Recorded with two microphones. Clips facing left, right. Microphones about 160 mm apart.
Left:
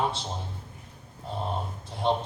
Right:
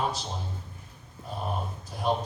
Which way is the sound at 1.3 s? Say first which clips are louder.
Left 1 dB; 25° left (ahead or behind).